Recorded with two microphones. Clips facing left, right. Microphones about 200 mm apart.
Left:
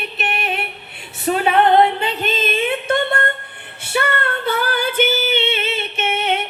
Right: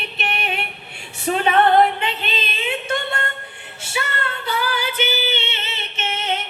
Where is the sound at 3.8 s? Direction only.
60° left (ahead or behind).